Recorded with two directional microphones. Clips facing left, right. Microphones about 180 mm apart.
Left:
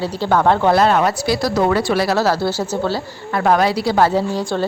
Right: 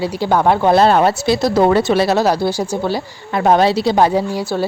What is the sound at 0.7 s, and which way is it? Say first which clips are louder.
Speech: right 3 dB; 30° right (ahead or behind).